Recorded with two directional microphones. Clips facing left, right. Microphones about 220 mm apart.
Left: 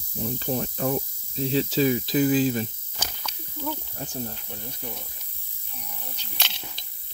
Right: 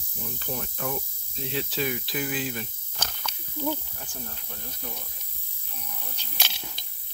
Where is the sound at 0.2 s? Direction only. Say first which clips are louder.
Left 7 dB; 30° left (ahead or behind).